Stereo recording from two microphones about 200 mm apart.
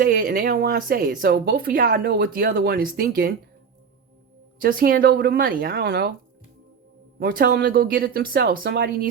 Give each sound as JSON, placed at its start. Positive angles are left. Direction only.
{"t": 0.0, "sound": "speech", "side_deg": -45}
{"t": 4.6, "sound": "speech", "side_deg": -45}
{"t": 7.2, "sound": "speech", "side_deg": -45}